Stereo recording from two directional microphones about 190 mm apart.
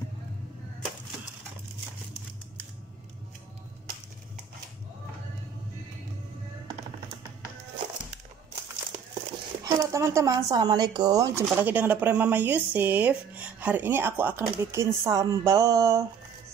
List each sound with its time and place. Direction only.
9.6 s speech: 15° right (ahead or behind)